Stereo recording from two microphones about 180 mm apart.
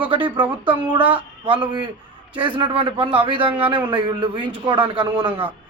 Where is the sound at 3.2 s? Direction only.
30° right (ahead or behind).